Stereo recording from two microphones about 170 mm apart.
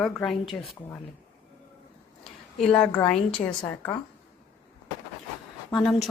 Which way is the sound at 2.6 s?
5° left (ahead or behind).